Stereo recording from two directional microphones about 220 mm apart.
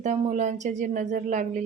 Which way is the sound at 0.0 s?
30° right (ahead or behind).